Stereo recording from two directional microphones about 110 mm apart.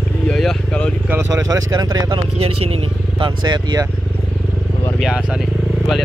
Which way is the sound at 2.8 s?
50° right (ahead or behind).